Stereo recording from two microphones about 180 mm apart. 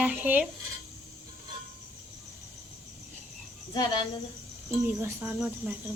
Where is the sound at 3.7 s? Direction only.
25° left (ahead or behind).